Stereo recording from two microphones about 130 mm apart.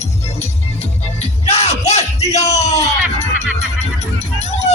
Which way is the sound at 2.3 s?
55° left (ahead or behind).